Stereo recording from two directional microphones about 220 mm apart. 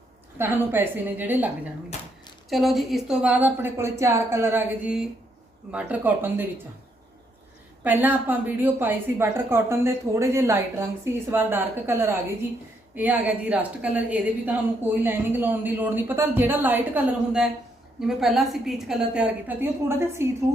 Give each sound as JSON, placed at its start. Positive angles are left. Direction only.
{"t": 0.3, "sound": "a woman's voice", "side_deg": -10}
{"t": 2.5, "sound": "a woman's voice", "side_deg": 0}
{"t": 7.9, "sound": "a woman's voice", "side_deg": -10}